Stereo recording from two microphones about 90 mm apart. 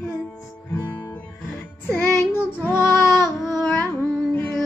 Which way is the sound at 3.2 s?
5° right (ahead or behind).